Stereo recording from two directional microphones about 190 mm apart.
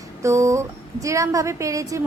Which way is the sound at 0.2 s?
15° right (ahead or behind).